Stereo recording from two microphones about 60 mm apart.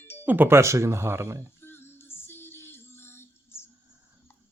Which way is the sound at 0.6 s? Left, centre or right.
Right.